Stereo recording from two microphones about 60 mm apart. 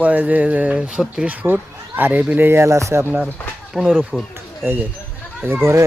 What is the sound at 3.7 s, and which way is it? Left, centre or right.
Speech, centre.